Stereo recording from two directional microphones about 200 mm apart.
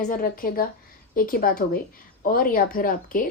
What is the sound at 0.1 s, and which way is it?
Speech, 45° left (ahead or behind).